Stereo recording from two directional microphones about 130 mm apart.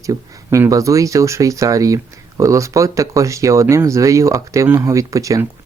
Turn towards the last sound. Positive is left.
turn(degrees=-25)  # may be behind; listen again after turning